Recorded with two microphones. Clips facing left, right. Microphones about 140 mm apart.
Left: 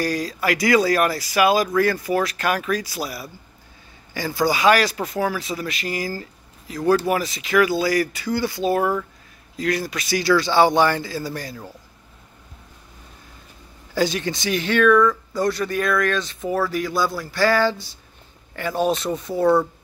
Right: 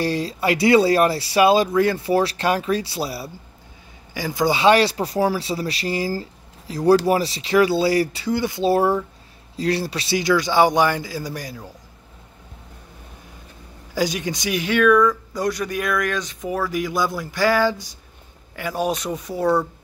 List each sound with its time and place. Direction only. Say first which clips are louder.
0.0 s speech: right 1 dB; 25° right (ahead or behind)
4.1 s speech: right 1 dB; 15° right (ahead or behind)
8.6 s speech: right 4 dB; 30° right (ahead or behind); by 11.6 s 15° right (ahead or behind)
13.9 s speech: left 1 dB; 10° right (ahead or behind)
19.4 s speech: left 2 dB; 10° left (ahead or behind)